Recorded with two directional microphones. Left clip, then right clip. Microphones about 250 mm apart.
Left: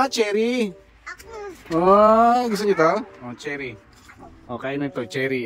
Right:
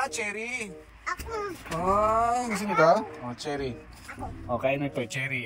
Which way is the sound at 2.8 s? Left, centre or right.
Centre.